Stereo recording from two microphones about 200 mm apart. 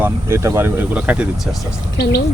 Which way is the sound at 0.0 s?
15° right (ahead or behind).